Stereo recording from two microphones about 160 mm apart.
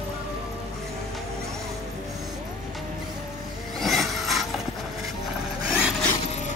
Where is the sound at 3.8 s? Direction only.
Centre (ahead or behind).